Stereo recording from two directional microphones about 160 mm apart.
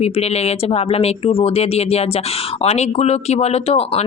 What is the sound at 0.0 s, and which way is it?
Speech, 40° left (ahead or behind).